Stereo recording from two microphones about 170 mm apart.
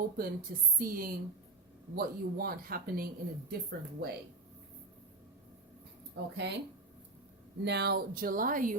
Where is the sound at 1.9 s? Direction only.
65° right (ahead or behind).